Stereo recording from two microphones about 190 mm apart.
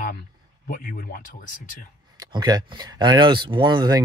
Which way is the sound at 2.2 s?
20° right (ahead or behind).